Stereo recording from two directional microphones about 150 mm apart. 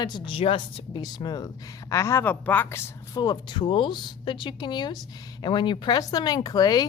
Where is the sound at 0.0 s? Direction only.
35° left (ahead or behind).